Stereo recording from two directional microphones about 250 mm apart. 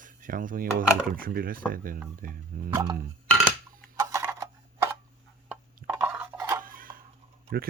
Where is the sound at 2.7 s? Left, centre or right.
Centre.